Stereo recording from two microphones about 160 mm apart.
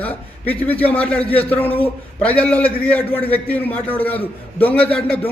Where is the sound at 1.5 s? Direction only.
10° left (ahead or behind).